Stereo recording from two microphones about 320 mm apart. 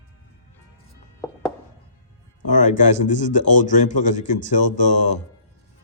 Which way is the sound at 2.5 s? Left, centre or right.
Left.